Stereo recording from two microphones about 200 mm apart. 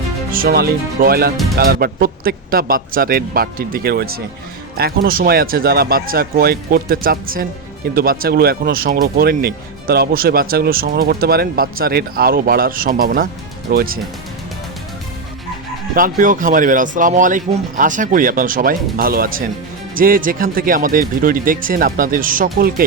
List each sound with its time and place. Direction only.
0.3 s speech: 45° right (ahead or behind)
16.0 s speech: 45° right (ahead or behind)